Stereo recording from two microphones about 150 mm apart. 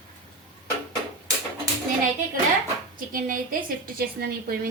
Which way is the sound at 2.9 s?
70° right (ahead or behind).